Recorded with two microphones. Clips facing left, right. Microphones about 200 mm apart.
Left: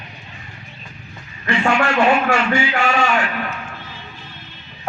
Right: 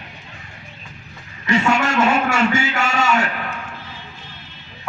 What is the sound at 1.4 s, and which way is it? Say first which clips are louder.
A man's voice: even; 45° right (ahead or behind).